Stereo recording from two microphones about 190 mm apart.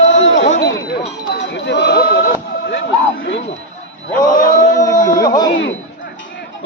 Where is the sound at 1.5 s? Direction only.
65° left (ahead or behind).